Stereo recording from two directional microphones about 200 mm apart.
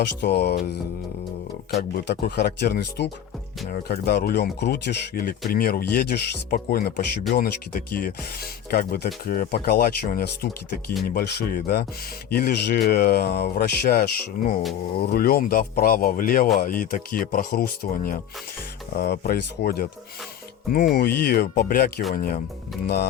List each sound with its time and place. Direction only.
0.0 s speech: 55° left (ahead or behind)